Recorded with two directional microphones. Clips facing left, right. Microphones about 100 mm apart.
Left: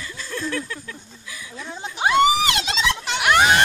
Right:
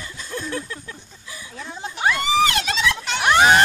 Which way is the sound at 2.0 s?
20° left (ahead or behind).